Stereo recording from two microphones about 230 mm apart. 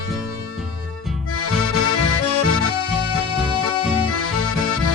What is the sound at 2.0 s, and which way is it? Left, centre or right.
Music, left.